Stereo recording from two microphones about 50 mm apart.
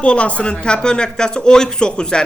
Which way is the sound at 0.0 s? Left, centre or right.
Left.